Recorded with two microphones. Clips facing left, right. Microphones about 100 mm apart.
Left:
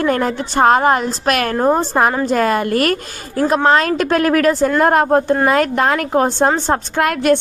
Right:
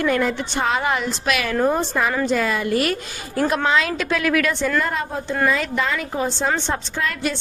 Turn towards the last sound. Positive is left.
turn(degrees=65)  # may be behind; listen again after turning